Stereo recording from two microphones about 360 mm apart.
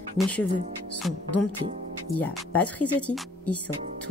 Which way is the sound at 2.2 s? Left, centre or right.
Centre.